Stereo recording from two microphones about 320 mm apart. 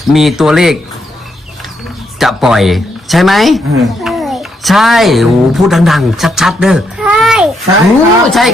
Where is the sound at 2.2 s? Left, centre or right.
Centre.